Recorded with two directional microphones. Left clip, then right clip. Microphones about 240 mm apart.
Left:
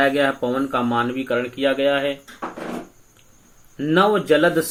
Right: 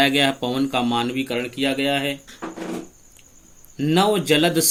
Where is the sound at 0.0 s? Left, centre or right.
Right.